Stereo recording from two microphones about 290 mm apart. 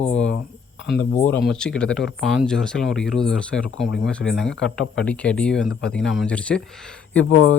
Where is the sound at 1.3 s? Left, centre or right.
Centre.